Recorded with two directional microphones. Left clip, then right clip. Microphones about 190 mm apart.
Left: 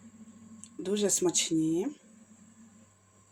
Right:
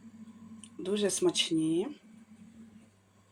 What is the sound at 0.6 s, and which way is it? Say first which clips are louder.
Speech: left 1 dB; 45° left (ahead or behind).